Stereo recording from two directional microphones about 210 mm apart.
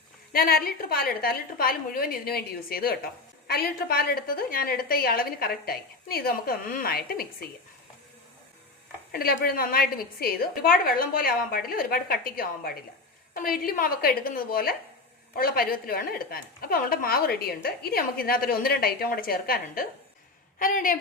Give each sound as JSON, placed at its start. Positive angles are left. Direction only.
{"t": 0.3, "sound": "a woman's voice", "side_deg": 45}
{"t": 9.1, "sound": "a woman's voice", "side_deg": 45}